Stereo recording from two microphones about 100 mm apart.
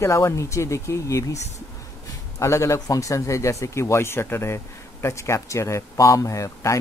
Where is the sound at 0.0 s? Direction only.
30° left (ahead or behind).